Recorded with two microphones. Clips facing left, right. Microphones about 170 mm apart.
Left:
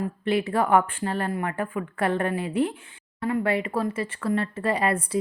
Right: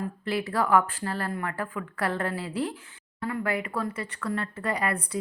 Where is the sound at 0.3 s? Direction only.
20° left (ahead or behind).